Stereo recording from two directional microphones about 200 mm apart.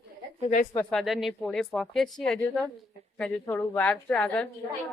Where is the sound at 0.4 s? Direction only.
40° left (ahead or behind).